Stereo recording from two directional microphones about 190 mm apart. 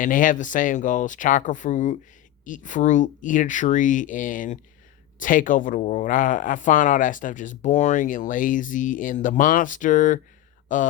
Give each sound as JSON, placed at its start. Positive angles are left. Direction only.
{"t": 0.0, "sound": "speech", "side_deg": 45}